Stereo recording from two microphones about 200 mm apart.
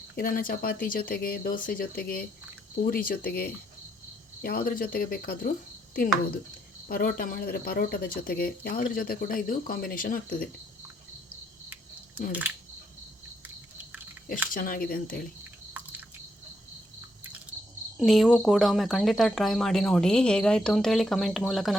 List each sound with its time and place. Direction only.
0.2 s speech: 45° left (ahead or behind)
14.5 s speech: 45° left (ahead or behind)
15.7 s drip: 10° right (ahead or behind)
17.9 s speech: centre (ahead or behind)